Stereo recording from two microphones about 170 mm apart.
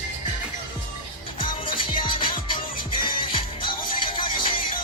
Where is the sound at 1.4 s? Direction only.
30° left (ahead or behind).